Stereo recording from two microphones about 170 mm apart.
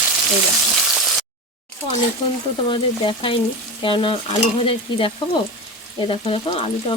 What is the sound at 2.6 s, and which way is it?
Frying, 30° left (ahead or behind).